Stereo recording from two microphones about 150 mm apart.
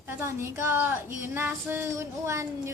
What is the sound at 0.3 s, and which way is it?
Speech, 20° right (ahead or behind).